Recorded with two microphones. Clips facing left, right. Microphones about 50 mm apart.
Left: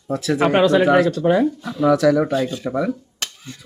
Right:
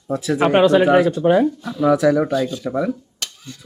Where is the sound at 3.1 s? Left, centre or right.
Left.